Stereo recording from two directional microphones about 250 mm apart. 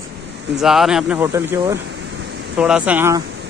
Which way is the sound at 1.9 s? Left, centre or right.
Right.